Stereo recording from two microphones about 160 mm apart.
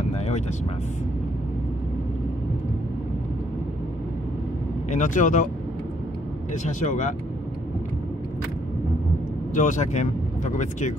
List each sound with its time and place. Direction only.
4.9 s speech: 50° left (ahead or behind)
6.5 s speech: 50° left (ahead or behind)
9.5 s speech: 50° left (ahead or behind)